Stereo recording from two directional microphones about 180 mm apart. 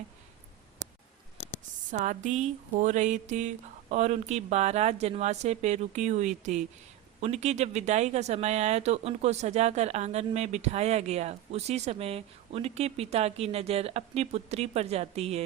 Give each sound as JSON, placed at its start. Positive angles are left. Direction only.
{"t": 1.9, "sound": "speech", "side_deg": -40}